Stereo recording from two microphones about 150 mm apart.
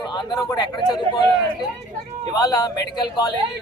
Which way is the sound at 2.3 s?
25° left (ahead or behind).